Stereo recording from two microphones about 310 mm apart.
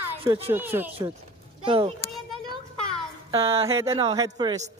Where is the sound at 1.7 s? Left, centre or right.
Centre.